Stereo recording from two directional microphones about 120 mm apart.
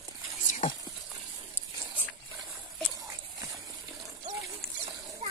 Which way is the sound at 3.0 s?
30° right (ahead or behind).